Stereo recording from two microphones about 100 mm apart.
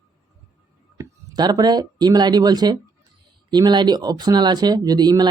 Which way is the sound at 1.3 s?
45° right (ahead or behind).